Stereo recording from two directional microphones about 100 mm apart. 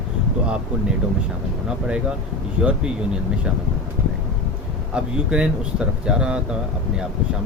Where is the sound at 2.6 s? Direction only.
10° right (ahead or behind).